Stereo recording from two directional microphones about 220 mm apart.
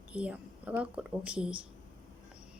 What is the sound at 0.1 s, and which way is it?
A woman's voice, 5° right (ahead or behind).